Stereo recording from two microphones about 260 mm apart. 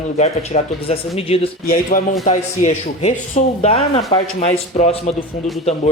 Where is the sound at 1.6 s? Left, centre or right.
Left.